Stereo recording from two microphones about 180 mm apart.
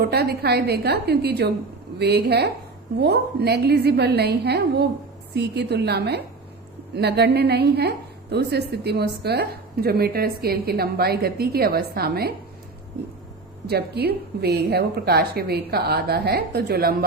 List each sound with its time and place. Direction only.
0.0 s a woman's voice: 60° right (ahead or behind)
13.7 s a woman's voice: 60° right (ahead or behind)